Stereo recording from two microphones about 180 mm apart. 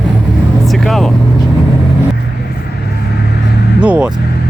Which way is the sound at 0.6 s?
Centre (ahead or behind).